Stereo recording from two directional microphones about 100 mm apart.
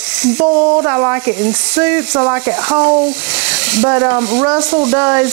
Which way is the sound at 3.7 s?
20° right (ahead or behind).